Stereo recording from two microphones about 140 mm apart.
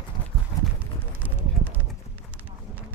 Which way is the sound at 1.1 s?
10° right (ahead or behind).